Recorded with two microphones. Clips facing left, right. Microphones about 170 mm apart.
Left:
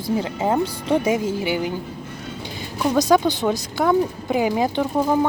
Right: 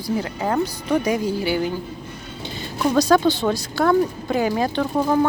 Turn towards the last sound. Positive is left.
turn(degrees=15)  # may be behind; listen again after turning